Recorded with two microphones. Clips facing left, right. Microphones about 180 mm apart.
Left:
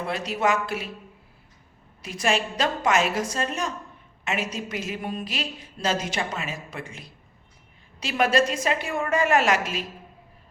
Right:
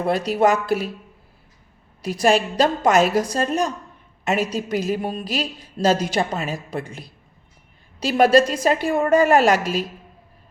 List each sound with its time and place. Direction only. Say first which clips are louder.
0.0 s a woman's voice: right 7 dB; 40° right (ahead or behind)
2.0 s a woman's voice: right 7 dB; 35° right (ahead or behind)